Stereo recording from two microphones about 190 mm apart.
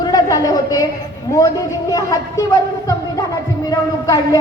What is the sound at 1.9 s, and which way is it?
A woman's voice, 20° left (ahead or behind).